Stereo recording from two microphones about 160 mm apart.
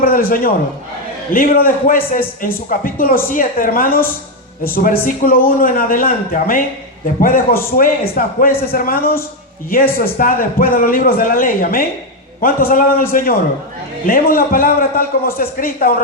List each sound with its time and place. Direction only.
0.0 s a man's voice: 65° left (ahead or behind)